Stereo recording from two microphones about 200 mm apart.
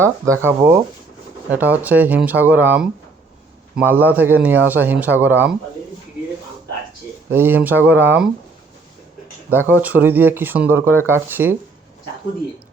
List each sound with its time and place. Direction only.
0.0 s a man's voice: 15° right (ahead or behind)
3.8 s a man's voice: 10° right (ahead or behind)
7.3 s a man's voice: 10° right (ahead or behind)
9.5 s a man's voice: 10° right (ahead or behind)